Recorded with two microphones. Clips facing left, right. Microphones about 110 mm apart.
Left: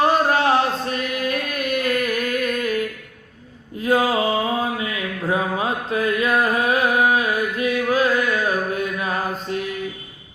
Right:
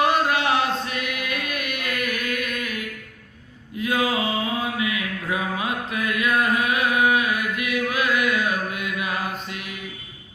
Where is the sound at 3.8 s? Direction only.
35° left (ahead or behind).